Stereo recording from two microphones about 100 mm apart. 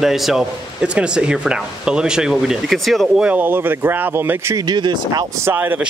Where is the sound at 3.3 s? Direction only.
20° right (ahead or behind).